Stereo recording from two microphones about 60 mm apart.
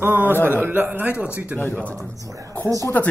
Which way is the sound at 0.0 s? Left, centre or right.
Right.